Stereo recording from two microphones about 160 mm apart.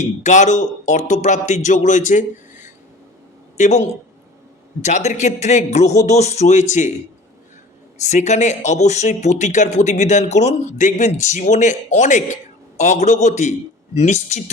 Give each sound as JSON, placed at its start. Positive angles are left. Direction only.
{"t": 0.0, "sound": "speech", "side_deg": 50}
{"t": 8.0, "sound": "speech", "side_deg": 45}